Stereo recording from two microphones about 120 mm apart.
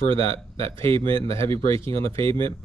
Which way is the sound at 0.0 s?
50° right (ahead or behind).